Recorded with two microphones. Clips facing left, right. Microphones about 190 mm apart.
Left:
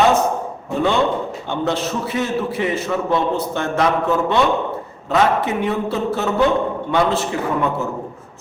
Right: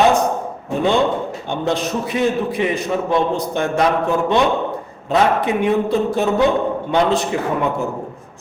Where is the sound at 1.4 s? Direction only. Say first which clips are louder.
Right 1 dB; 15° right (ahead or behind).